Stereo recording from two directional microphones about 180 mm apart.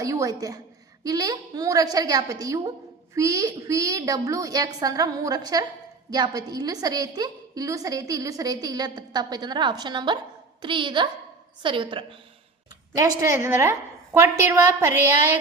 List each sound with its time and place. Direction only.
0.0 s a woman's voice: 20° right (ahead or behind)